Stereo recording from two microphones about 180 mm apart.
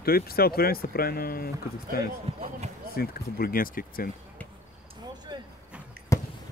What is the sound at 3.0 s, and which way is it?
Speech, 55° left (ahead or behind).